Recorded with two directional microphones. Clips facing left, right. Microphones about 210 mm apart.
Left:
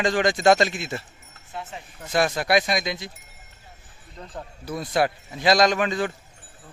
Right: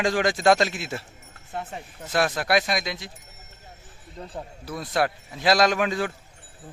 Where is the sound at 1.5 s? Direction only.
50° right (ahead or behind).